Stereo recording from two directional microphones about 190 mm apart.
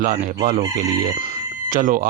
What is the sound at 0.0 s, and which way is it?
Speech, 40° right (ahead or behind).